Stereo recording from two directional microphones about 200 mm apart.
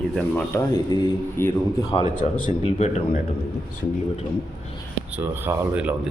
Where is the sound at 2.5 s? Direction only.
30° left (ahead or behind).